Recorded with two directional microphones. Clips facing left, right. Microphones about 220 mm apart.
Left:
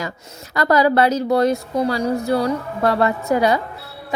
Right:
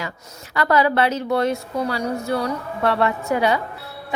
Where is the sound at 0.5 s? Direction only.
40° left (ahead or behind).